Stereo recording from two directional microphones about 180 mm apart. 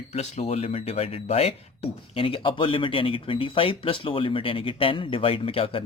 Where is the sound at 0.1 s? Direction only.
35° left (ahead or behind).